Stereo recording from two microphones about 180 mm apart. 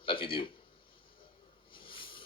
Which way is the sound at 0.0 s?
30° left (ahead or behind).